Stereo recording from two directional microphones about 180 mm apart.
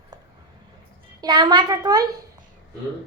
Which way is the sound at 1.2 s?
25° right (ahead or behind).